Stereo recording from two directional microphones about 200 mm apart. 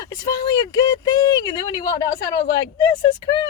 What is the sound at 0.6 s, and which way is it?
A woman's voice, 20° left (ahead or behind).